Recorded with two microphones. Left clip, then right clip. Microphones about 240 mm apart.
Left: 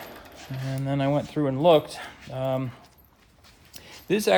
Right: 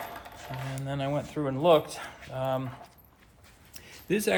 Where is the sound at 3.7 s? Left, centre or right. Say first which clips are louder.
Left 4 dB; left.